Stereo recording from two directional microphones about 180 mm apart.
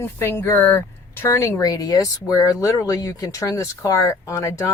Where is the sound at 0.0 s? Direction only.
15° left (ahead or behind).